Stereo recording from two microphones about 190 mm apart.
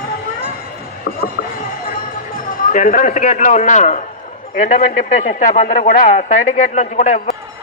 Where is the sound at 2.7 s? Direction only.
45° left (ahead or behind).